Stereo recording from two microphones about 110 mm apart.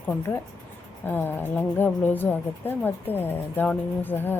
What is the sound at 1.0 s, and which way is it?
Speech, 20° left (ahead or behind).